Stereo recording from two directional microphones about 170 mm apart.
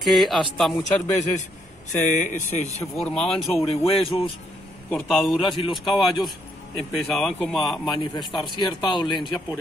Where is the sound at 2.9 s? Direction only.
5° left (ahead or behind).